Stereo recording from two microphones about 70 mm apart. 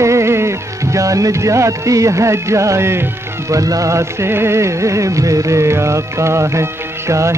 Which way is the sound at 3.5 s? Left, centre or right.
Right.